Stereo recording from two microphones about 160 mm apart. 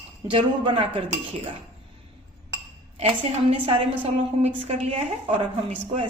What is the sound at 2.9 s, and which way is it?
A woman's voice, 40° right (ahead or behind).